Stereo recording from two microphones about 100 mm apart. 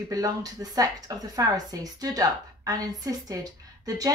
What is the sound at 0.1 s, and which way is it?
A woman's voice, 40° right (ahead or behind).